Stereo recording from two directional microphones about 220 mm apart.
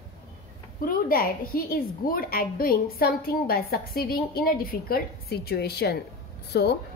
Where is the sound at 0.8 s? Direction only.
40° left (ahead or behind).